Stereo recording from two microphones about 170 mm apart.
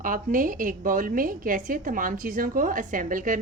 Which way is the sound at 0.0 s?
55° right (ahead or behind).